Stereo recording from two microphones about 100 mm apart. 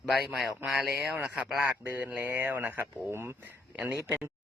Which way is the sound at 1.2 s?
10° right (ahead or behind).